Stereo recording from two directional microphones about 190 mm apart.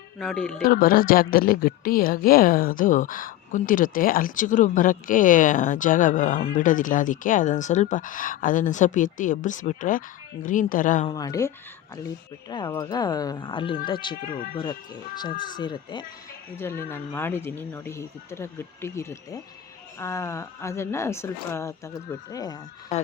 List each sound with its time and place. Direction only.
0.2 s speech: 5° left (ahead or behind)
0.6 s speech: 50° left (ahead or behind)
11.0 s speech: 20° left (ahead or behind)
14.2 s speech: 50° left (ahead or behind)
14.6 s speech: 25° left (ahead or behind)
16.9 s speech: 10° left (ahead or behind)